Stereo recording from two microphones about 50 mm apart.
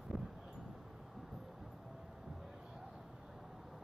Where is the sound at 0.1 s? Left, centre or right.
Centre.